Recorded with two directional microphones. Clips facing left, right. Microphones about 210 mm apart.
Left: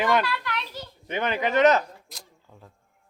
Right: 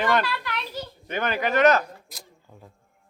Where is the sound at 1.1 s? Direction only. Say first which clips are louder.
Even; 20° left (ahead or behind).